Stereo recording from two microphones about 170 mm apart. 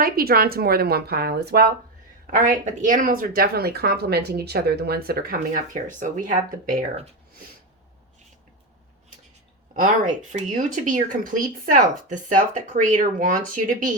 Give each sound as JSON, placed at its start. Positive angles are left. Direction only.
{"t": 0.0, "sound": "a woman's voice", "side_deg": -60}
{"t": 2.2, "sound": "a woman's voice", "side_deg": -50}
{"t": 9.7, "sound": "speech", "side_deg": -50}